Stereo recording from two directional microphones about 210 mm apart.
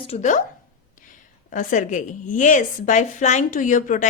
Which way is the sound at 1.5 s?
40° left (ahead or behind).